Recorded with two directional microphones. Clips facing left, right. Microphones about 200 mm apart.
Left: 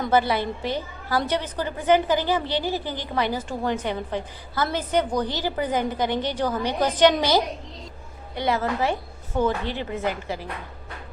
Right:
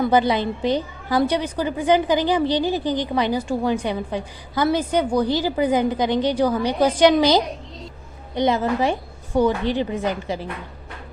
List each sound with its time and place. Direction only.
0.0 s a woman's voice: 15° right (ahead or behind)